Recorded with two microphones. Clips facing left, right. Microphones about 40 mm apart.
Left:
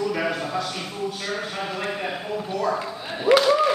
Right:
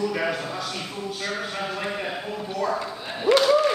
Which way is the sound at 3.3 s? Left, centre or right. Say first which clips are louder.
Left 2 dB; left.